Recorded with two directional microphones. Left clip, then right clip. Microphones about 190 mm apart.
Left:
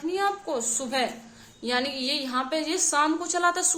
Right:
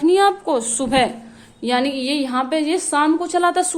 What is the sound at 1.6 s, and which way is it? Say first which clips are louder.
A woman's voice: right 7 dB; 30° right (ahead or behind).